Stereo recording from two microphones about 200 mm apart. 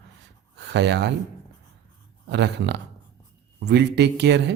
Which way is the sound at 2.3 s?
60° right (ahead or behind).